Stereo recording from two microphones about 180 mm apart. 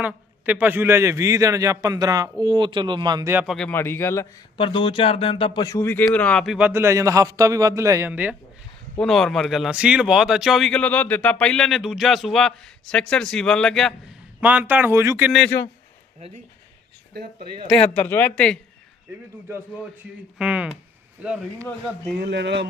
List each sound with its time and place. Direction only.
0.0 s a man's voice: 10° right (ahead or behind)
3.3 s a man's voice: centre (ahead or behind)
4.5 s speech: 25° left (ahead or behind); by 8.4 s 10° right (ahead or behind)
9.0 s speech: centre (ahead or behind)
14.4 s a man's voice: 10° right (ahead or behind)
15.3 s speech: centre (ahead or behind)
17.9 s a man's voice: 10° left (ahead or behind)
20.4 s a man's voice: 5° right (ahead or behind)
22.2 s speech: 75° right (ahead or behind)